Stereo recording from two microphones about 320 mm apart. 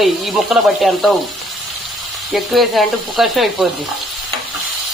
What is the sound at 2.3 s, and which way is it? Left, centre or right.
Speech, centre.